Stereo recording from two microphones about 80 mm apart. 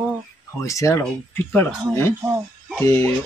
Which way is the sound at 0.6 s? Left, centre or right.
Left.